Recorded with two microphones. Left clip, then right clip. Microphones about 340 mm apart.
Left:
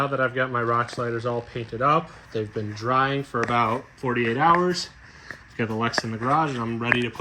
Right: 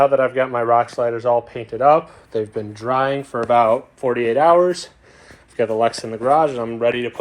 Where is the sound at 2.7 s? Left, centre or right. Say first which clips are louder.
Right 3 dB; centre.